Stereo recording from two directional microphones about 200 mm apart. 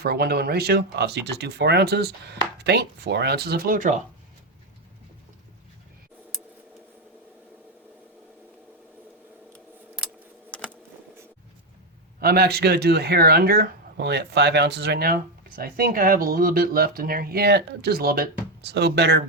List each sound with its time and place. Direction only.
0.0 s speech: 50° right (ahead or behind)
10.5 s keys jangling: 5° left (ahead or behind)
12.2 s speech: 50° right (ahead or behind)